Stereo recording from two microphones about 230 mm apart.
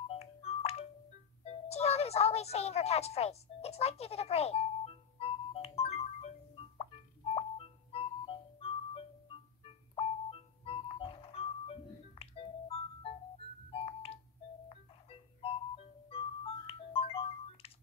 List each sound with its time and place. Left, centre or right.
0.1 s ringtone: left
1.4 s music: left